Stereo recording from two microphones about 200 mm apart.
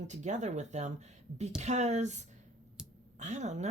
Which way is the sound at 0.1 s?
35° right (ahead or behind).